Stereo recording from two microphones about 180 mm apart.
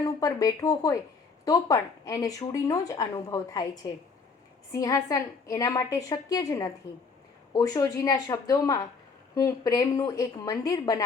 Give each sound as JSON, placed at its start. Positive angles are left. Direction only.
{"t": 0.0, "sound": "speech", "side_deg": 20}
{"t": 4.7, "sound": "speech", "side_deg": 20}